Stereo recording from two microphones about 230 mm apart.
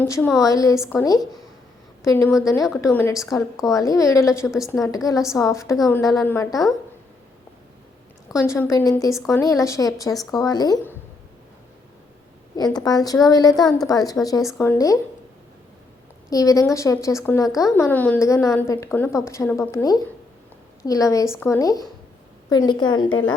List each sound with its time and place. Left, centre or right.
0.0 s a woman's voice: centre
0.8 s a woman's voice: centre
2.0 s a woman's voice: centre
4.4 s a woman's voice: centre
4.8 s a woman's voice: centre
8.3 s a woman's voice: centre
12.5 s a woman's voice: centre
16.3 s a woman's voice: centre